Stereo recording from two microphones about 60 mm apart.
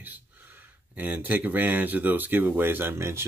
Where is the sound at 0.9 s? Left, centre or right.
Right.